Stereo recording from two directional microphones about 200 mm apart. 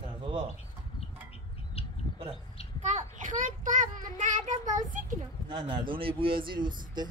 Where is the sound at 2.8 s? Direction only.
35° right (ahead or behind).